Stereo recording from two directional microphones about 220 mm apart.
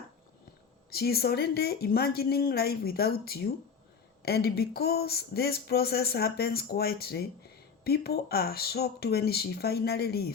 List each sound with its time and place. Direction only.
0.9 s speech: 45° left (ahead or behind)